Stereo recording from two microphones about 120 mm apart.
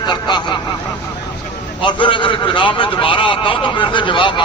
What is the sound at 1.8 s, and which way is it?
A man's voice, 45° left (ahead or behind).